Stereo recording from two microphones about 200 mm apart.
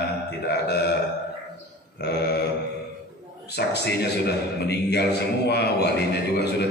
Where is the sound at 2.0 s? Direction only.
55° left (ahead or behind).